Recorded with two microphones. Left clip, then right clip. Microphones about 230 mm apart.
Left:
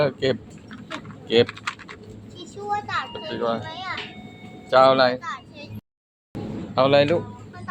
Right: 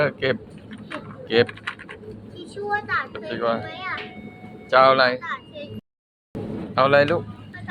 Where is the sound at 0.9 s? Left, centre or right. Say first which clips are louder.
Left 1 dB; left.